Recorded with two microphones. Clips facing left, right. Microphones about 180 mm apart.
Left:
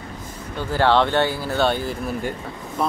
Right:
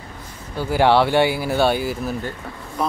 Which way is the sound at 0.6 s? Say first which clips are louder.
Right 2 dB; 10° right (ahead or behind).